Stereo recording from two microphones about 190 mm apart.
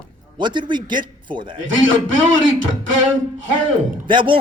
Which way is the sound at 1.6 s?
85° right.